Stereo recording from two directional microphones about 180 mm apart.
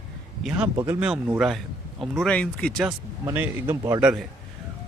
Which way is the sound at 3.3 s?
10° right (ahead or behind).